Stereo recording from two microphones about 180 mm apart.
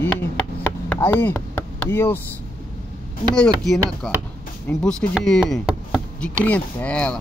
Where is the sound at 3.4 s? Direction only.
5° left (ahead or behind).